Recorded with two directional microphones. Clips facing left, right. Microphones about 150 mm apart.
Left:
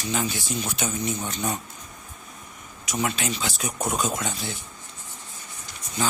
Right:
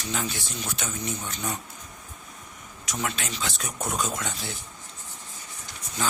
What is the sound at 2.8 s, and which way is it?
Speech, 5° left (ahead or behind).